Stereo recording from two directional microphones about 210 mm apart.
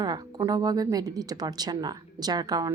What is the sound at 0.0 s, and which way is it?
Speech, 20° right (ahead or behind).